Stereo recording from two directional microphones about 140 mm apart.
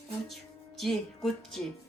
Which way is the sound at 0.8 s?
5° left (ahead or behind).